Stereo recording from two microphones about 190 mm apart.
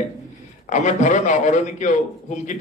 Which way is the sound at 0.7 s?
40° left (ahead or behind).